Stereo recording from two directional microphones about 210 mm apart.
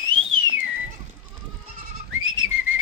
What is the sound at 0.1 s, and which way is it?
Whistling, 70° right (ahead or behind).